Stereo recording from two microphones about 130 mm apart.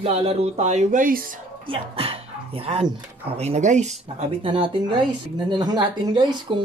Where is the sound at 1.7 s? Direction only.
45° right (ahead or behind).